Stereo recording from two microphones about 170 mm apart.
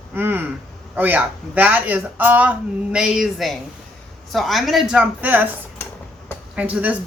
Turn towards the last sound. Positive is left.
turn(degrees=-10)  # may be behind; listen again after turning